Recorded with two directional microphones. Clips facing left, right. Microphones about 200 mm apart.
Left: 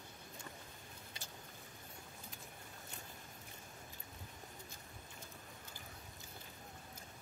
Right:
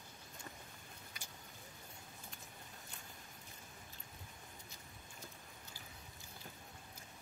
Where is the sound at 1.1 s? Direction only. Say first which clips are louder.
Left 3 dB; 25° left (ahead or behind).